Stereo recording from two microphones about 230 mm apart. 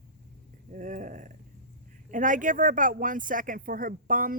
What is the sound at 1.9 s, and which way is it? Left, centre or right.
Speech, right.